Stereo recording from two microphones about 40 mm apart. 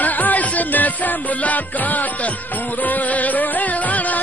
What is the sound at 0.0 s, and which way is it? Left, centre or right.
Music, left.